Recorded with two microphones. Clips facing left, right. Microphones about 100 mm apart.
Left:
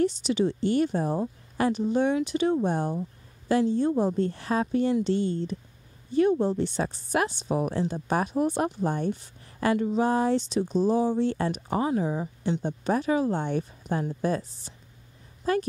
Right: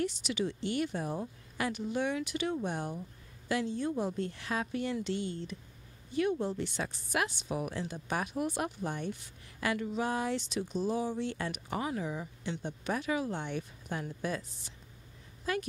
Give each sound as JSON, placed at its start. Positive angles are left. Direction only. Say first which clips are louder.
{"t": 0.0, "sound": "a woman's voice", "louder": "left 9 dB", "side_deg": 30}